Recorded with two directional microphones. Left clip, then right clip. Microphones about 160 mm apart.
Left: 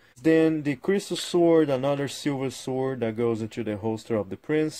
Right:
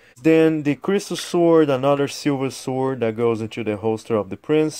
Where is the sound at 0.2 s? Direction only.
20° right (ahead or behind).